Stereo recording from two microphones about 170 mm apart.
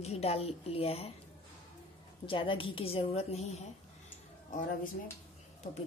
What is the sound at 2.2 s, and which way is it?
A woman's voice, 30° left (ahead or behind).